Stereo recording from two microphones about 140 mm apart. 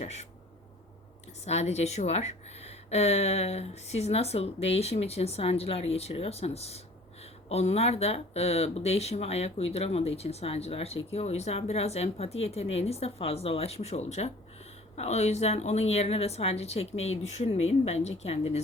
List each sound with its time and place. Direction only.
0.0 s speech: 50° left (ahead or behind)
1.5 s speech: 50° left (ahead or behind)